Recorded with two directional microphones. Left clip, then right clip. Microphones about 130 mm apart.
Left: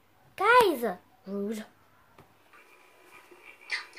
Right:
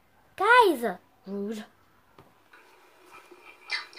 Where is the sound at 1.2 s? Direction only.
15° right (ahead or behind).